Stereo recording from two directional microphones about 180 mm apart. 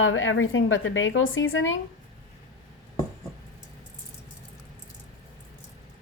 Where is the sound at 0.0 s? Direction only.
90° left.